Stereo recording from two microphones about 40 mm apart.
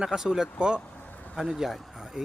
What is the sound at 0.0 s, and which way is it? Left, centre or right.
Speech, centre.